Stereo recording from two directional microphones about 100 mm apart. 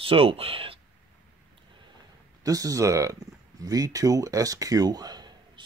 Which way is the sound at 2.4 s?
35° right (ahead or behind).